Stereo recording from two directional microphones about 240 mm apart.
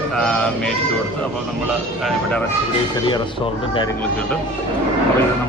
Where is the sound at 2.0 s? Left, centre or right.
Centre.